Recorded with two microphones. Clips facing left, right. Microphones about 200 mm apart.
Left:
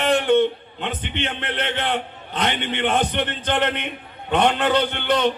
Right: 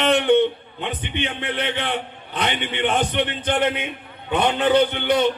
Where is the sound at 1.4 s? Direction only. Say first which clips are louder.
Even; 55° left (ahead or behind).